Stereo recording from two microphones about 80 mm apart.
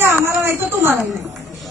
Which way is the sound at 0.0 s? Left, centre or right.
Right.